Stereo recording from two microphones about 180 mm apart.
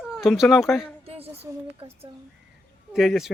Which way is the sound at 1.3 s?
30° right (ahead or behind).